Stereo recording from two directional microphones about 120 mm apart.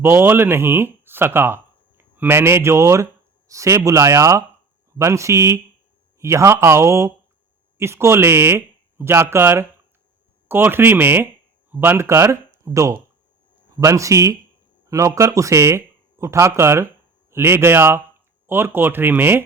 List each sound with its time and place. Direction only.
0.0 s speech: 20° right (ahead or behind)